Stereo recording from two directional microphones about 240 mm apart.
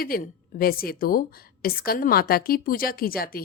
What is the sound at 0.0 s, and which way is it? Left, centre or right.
A woman's voice, left.